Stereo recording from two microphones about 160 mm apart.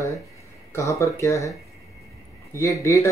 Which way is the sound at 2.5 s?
20° left (ahead or behind).